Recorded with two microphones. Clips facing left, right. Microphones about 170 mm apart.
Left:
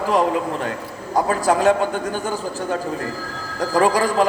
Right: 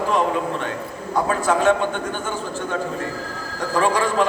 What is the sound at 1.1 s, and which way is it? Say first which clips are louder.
A man's voice: left 2 dB; 35° left (ahead or behind).